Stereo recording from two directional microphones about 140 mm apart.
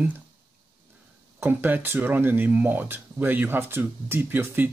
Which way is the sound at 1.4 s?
15° right (ahead or behind).